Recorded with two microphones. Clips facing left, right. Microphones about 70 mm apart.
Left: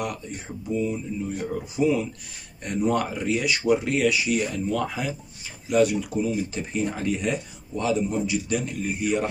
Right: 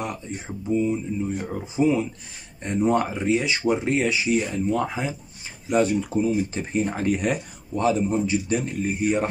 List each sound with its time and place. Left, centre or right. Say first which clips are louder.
0.7 s speech: right 3 dB; right